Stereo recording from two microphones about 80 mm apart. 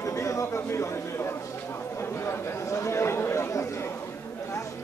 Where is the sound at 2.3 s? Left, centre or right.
Left.